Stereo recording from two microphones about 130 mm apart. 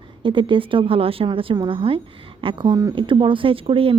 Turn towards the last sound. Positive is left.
turn(degrees=-45)  # may be behind; listen again after turning